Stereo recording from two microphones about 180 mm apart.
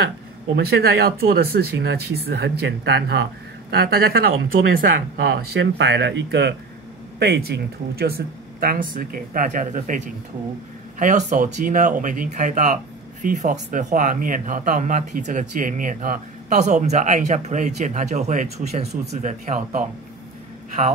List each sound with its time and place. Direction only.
0.6 s speech: 60° right (ahead or behind)
8.5 s speech: 50° right (ahead or behind)